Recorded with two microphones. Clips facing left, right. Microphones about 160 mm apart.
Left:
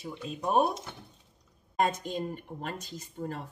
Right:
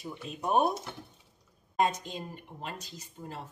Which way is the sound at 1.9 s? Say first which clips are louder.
Left 5 dB; 50° left (ahead or behind).